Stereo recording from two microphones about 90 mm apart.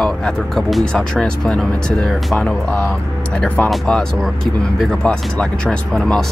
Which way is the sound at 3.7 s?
10° left (ahead or behind).